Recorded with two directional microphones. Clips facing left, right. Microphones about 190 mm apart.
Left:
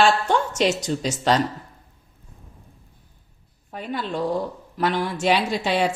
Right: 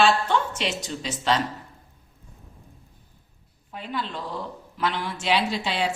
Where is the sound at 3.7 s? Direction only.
45° left (ahead or behind).